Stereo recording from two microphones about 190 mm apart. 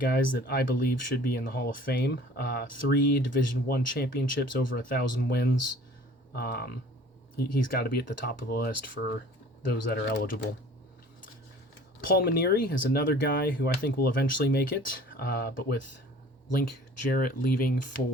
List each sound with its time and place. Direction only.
0.0 s speech: 50° left (ahead or behind)
12.0 s speech: 55° left (ahead or behind)
17.1 s speech: 50° left (ahead or behind)